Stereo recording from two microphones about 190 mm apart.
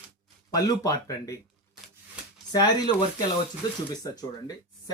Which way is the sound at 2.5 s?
20° left (ahead or behind).